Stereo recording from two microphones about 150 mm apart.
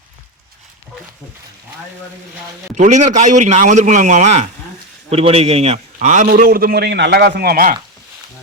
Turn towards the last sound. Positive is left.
turn(degrees=-85)